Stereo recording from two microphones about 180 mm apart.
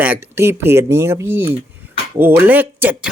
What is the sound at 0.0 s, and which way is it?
Speech, 10° right (ahead or behind).